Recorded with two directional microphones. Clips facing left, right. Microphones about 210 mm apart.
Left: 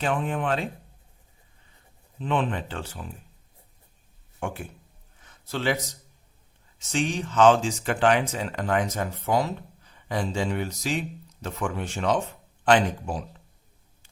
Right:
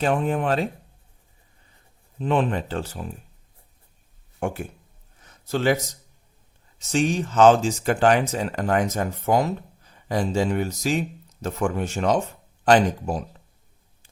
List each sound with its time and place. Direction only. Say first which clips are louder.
0.0 s speech: right 4 dB; 40° right (ahead or behind)
2.2 s speech: right 4 dB; 40° right (ahead or behind)
4.4 s speech: right 5 dB; 45° right (ahead or behind)
5.2 s a sound: right 5 dB; 45° right (ahead or behind)
6.7 s speech: right 5 dB; 40° right (ahead or behind)